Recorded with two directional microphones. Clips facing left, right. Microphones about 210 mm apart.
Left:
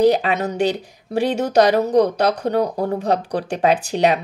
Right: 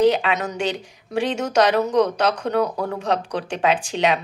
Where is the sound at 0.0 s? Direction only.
40° left (ahead or behind).